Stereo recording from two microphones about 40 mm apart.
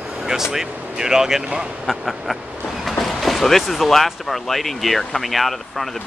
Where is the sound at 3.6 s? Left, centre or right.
Centre.